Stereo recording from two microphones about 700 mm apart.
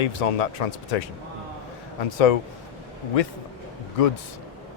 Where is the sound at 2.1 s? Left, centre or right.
Left.